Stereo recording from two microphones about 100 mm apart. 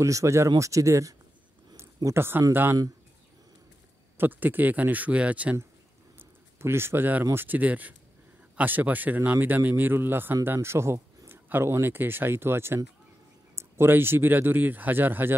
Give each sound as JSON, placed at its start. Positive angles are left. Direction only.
{"t": 0.0, "sound": "speech", "side_deg": -30}
{"t": 2.1, "sound": "speech", "side_deg": -25}
{"t": 4.2, "sound": "speech", "side_deg": -20}
{"t": 6.1, "sound": "a sound", "side_deg": -25}
{"t": 7.2, "sound": "speech", "side_deg": -20}